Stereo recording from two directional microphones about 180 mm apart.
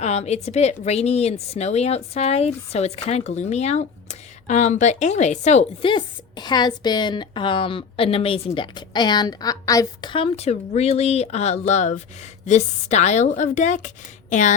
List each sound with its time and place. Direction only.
0.0 s a woman's voice: 40° left (ahead or behind)